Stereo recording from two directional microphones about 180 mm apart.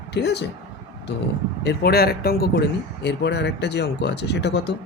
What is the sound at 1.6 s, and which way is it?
Speech, 60° left (ahead or behind).